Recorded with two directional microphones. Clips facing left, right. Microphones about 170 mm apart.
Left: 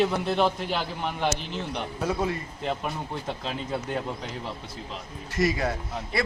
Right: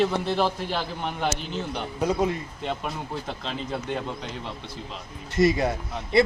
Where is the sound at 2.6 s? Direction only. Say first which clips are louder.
Left 1 dB; 5° left (ahead or behind).